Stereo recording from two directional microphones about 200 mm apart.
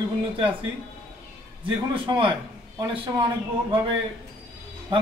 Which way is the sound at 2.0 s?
25° right (ahead or behind).